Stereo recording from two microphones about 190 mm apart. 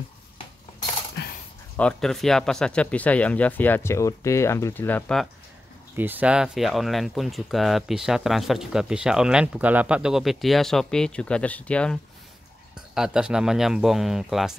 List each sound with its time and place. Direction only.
1.2 s a sound: 60° left (ahead or behind)
1.8 s speech: 5° left (ahead or behind)
5.9 s speech: 10° right (ahead or behind)